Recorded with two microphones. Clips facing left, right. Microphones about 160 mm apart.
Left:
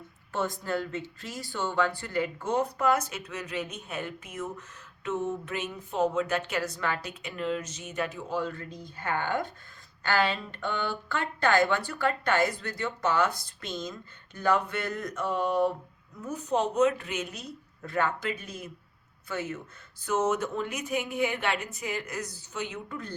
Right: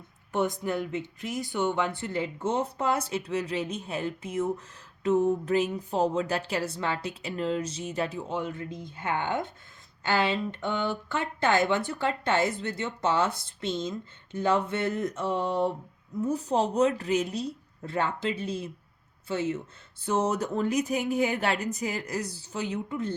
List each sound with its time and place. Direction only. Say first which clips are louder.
0.3 s speech: right 3 dB; 20° right (ahead or behind); by 22.8 s 35° right (ahead or behind)
22.9 s speech: right 7 dB; 25° right (ahead or behind)